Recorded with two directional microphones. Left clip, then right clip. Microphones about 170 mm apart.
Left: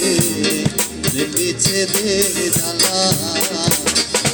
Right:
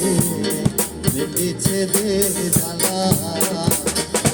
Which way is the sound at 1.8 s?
40° right (ahead or behind).